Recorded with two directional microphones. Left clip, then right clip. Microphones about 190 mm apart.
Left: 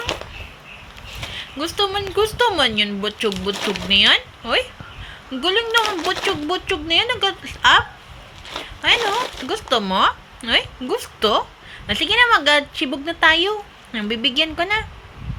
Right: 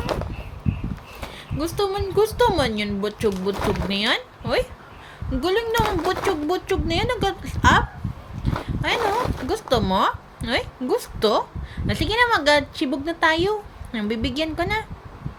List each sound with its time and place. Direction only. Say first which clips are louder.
1.3 s speech: left 2 dB; 25° right (ahead or behind)